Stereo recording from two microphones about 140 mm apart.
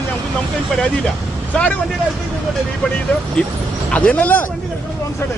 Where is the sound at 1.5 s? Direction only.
10° left (ahead or behind).